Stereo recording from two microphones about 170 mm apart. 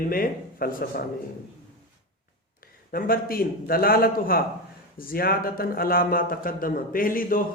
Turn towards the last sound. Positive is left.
turn(degrees=55)  # may be behind; listen again after turning